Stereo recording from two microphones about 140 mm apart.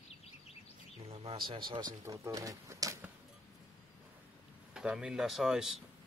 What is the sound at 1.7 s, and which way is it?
Speech, 30° right (ahead or behind).